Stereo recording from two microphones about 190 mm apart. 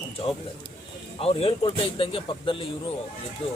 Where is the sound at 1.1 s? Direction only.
30° left (ahead or behind).